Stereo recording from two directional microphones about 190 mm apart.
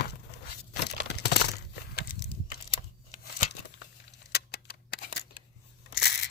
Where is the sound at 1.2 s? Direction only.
60° left (ahead or behind).